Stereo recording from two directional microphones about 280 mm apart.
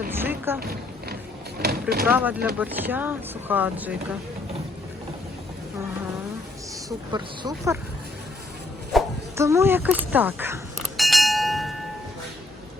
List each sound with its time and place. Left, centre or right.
0.1 s boat: centre
0.6 s speech: right
2.0 s speech: centre
7.1 s speech: centre
8.9 s a sound: centre